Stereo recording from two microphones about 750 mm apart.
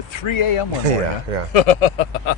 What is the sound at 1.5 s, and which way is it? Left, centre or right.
Speech, left.